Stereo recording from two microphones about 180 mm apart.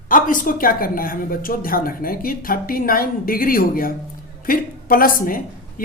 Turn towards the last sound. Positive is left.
turn(degrees=50)  # may be behind; listen again after turning